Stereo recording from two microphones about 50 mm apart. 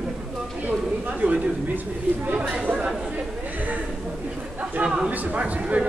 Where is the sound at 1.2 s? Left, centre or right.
Right.